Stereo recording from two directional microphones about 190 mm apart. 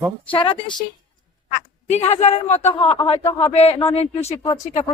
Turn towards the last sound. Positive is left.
turn(degrees=40)  # may be behind; listen again after turning